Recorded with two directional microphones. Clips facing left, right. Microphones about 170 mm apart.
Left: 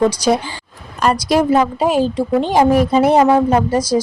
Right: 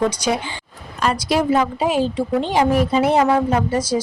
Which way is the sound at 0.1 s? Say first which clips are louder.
Left 5 dB; 35° left (ahead or behind).